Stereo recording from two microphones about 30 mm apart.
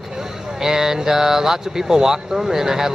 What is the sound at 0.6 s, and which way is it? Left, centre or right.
Speech, centre.